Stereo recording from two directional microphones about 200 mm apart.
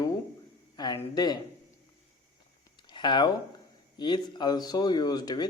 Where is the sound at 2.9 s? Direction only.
25° left (ahead or behind).